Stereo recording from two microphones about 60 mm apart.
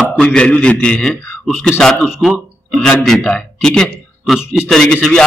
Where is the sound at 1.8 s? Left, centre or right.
Centre.